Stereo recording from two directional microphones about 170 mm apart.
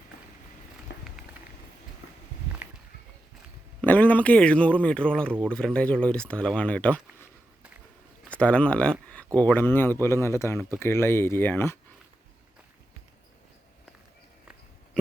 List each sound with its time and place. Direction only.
0.9 s run: 90° left
3.8 s speech: 10° left (ahead or behind)
8.3 s speech: 5° left (ahead or behind)